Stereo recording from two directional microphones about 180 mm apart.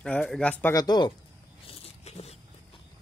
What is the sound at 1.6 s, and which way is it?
Biting, 35° left (ahead or behind).